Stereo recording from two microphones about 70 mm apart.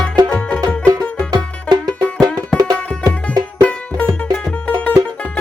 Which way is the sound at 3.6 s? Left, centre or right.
Centre.